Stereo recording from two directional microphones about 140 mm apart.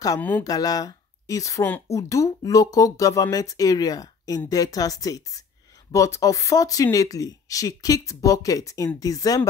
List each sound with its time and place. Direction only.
0.4 s speech: 25° left (ahead or behind)